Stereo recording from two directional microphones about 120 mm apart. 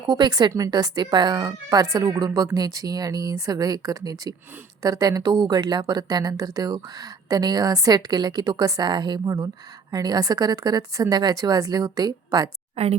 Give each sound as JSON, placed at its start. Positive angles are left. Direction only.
{"t": 0.1, "sound": "speech", "side_deg": -35}
{"t": 12.7, "sound": "speech", "side_deg": -60}